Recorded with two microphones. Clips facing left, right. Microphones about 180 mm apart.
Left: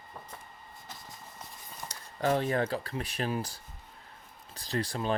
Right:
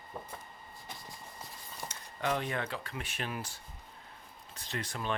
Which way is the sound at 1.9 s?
35° left (ahead or behind).